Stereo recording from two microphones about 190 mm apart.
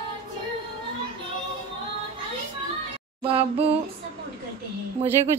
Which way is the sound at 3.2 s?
30° right (ahead or behind).